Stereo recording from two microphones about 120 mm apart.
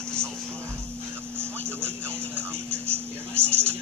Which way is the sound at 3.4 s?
20° right (ahead or behind).